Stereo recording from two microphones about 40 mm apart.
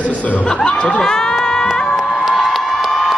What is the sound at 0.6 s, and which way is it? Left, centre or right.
Speech, left.